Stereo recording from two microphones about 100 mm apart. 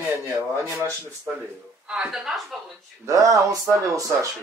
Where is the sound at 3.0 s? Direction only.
35° right (ahead or behind).